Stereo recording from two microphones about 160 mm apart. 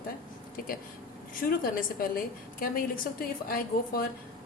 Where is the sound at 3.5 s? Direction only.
70° left (ahead or behind).